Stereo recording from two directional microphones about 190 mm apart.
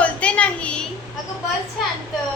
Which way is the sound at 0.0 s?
5° left (ahead or behind).